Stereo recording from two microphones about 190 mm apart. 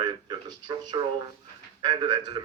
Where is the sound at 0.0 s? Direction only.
20° right (ahead or behind).